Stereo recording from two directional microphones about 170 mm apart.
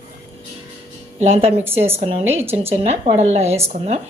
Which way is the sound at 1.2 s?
40° right (ahead or behind).